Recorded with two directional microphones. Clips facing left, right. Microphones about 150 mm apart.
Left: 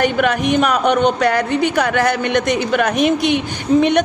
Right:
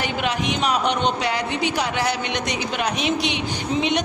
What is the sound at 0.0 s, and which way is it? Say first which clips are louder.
A woman's voice: left 8 dB; 50° left (ahead or behind).